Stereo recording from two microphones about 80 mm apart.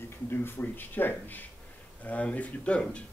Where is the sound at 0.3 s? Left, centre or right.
Left.